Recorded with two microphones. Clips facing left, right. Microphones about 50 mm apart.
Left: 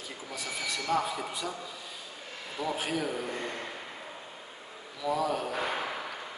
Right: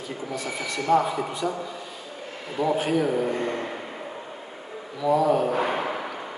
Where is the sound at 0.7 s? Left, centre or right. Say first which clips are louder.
Right 9 dB; centre.